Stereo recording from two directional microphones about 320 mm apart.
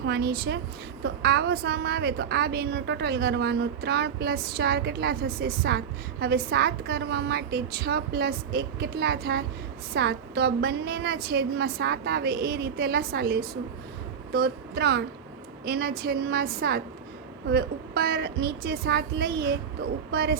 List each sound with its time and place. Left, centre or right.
0.0 s a woman's voice: right